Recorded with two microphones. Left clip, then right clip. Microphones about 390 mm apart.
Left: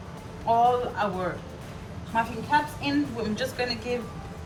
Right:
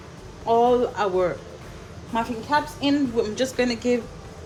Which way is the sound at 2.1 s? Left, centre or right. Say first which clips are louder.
Right 1 dB; right.